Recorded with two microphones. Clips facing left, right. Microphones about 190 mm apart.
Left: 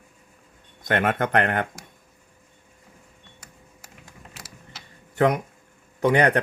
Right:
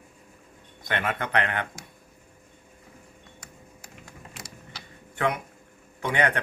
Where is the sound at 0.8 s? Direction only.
50° left (ahead or behind).